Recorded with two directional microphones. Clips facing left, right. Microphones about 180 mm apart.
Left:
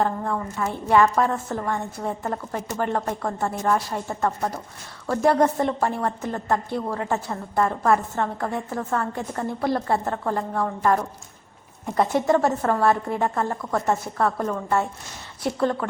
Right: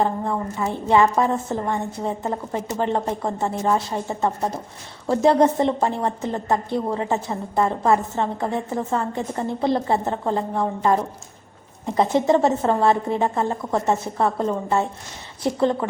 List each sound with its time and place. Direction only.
0.0 s a woman's voice: 15° right (ahead or behind)